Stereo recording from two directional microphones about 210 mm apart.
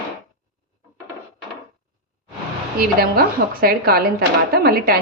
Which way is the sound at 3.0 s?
45° right (ahead or behind).